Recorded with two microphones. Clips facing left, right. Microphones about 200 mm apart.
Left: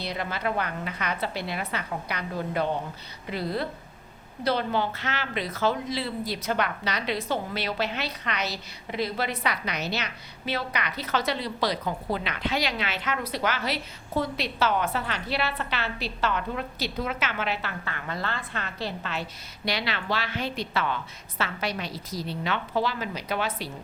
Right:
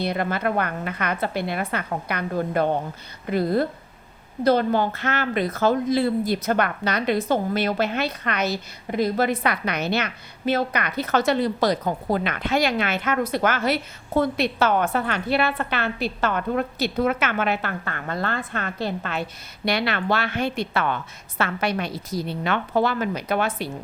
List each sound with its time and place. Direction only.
0.0 s a woman's voice: 55° right (ahead or behind)